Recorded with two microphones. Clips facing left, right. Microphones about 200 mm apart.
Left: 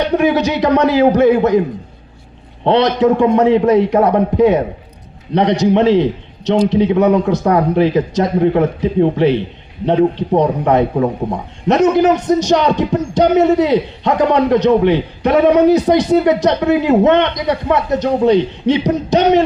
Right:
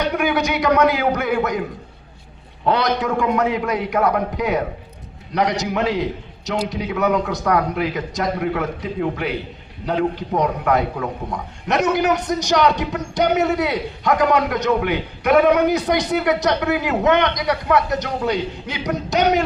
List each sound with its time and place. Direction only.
0.0 s a man's voice: 30° left (ahead or behind)
2.6 s a man's voice: 30° left (ahead or behind)